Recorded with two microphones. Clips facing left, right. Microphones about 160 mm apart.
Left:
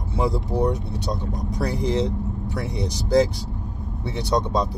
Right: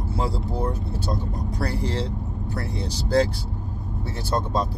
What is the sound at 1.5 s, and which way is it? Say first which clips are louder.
Speech: left 5 dB; 15° left (ahead or behind).